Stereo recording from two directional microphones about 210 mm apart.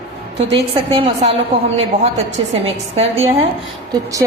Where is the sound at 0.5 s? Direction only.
25° right (ahead or behind).